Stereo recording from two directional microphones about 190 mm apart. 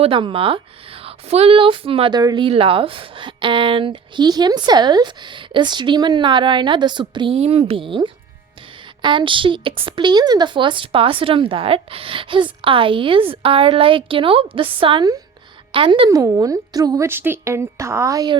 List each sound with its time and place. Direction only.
0.0 s a woman's voice: 25° right (ahead or behind)
16.0 s speech: 15° right (ahead or behind)